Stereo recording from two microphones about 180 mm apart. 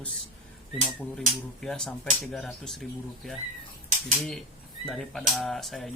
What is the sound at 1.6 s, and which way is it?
Cutlery, 5° left (ahead or behind).